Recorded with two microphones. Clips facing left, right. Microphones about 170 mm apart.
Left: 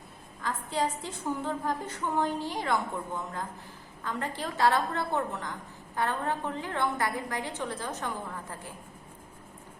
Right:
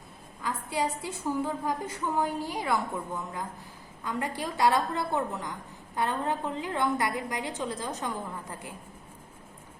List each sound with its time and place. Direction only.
0.4 s a woman's voice: 10° right (ahead or behind)
4.0 s a woman's voice: 10° right (ahead or behind)